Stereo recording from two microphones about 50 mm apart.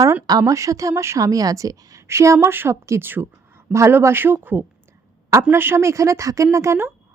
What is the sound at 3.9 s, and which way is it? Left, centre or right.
Speech, right.